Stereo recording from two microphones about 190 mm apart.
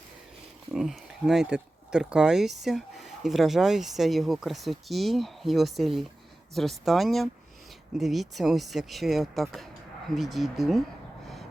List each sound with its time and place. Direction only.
0.7 s speech: centre (ahead or behind)